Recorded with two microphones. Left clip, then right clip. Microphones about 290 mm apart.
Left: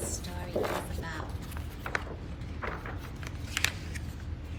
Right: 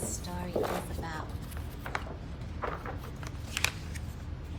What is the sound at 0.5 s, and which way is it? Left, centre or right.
Boat, centre.